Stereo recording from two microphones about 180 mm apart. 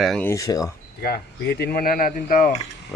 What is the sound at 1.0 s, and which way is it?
Speech, 60° left (ahead or behind).